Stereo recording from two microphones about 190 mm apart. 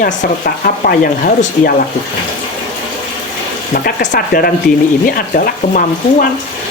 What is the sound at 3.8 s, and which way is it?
Speech, 50° left (ahead or behind).